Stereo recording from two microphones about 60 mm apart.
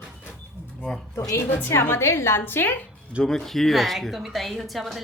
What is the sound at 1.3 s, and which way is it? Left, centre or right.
A woman's voice, left.